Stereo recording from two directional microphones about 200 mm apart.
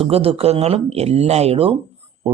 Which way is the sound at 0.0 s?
30° right (ahead or behind).